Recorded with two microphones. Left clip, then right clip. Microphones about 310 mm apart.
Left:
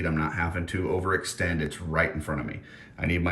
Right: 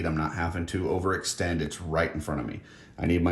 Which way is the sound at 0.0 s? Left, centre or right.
Centre.